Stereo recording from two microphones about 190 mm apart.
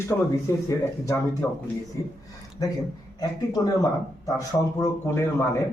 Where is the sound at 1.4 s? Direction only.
10° left (ahead or behind).